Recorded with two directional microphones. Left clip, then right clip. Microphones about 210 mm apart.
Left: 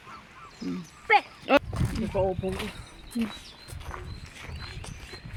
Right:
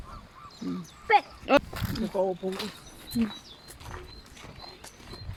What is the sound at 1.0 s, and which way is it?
Speech, 10° left (ahead or behind).